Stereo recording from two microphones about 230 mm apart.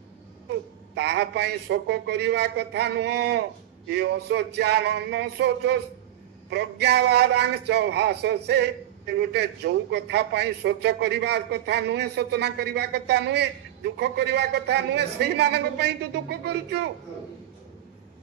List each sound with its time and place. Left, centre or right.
0.9 s a man's voice: right